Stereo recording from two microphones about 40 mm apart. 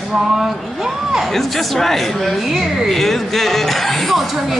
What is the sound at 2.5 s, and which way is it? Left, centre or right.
Speech, centre.